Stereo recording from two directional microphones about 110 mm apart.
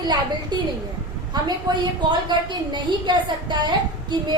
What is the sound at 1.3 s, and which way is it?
A woman's voice, 40° right (ahead or behind).